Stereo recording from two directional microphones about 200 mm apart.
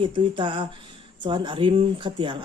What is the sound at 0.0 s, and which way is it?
Speech, 25° right (ahead or behind).